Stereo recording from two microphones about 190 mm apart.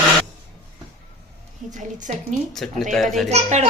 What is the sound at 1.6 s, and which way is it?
Speech, 40° right (ahead or behind).